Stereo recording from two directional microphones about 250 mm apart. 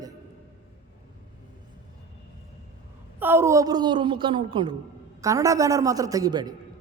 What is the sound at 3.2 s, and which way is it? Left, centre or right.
A woman's voice, centre.